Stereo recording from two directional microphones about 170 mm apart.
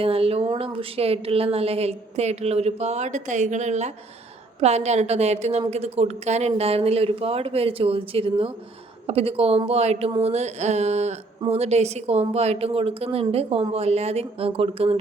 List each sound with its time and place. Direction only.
0.0 s a woman's voice: 35° right (ahead or behind)